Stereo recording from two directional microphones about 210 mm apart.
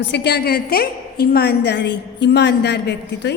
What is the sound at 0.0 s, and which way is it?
A woman's voice, 55° left (ahead or behind).